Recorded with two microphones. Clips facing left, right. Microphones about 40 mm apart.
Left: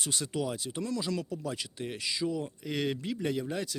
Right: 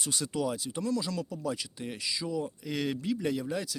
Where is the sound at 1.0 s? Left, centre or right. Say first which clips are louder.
Even; left.